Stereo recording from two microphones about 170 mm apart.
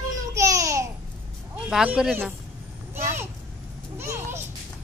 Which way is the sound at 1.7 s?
5° right (ahead or behind).